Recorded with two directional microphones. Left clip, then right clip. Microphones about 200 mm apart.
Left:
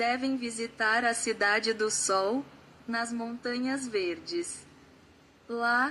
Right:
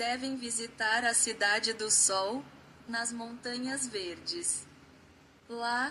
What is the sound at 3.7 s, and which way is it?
Speech, 50° left (ahead or behind).